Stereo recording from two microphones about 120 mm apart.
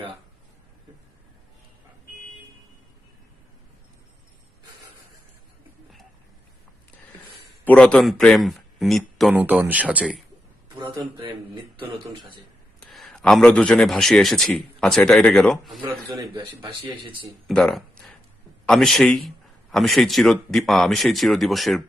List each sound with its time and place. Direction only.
7.6 s a man's voice: 10° left (ahead or behind)
9.3 s speech: 10° right (ahead or behind)
10.8 s speech: 40° right (ahead or behind)
12.9 s a man's voice: centre (ahead or behind)
16.9 s speech: 45° right (ahead or behind)
17.5 s a man's voice: 5° left (ahead or behind)